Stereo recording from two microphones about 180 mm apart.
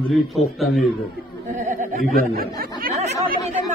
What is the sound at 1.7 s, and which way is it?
Snicker, 50° right (ahead or behind).